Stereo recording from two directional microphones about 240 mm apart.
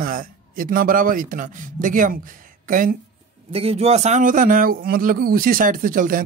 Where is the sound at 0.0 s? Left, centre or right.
Right.